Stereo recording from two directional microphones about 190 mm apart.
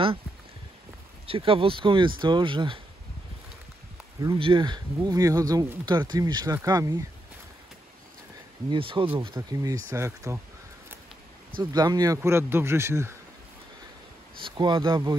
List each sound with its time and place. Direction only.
1.2 s speech: 30° right (ahead or behind)
4.2 s speech: 25° right (ahead or behind)
8.6 s speech: 25° right (ahead or behind)
11.7 s speech: 20° right (ahead or behind)
14.4 s speech: 25° right (ahead or behind)